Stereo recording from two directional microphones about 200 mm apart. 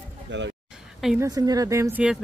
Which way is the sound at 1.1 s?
20° right (ahead or behind).